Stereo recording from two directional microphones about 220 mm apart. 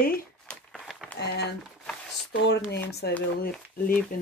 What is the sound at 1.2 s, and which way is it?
Speech, 50° left (ahead or behind).